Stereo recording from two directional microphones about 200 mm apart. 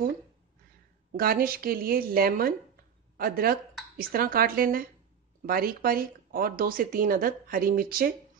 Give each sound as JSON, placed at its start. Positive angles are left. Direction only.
{"t": 1.1, "sound": "speech", "side_deg": -45}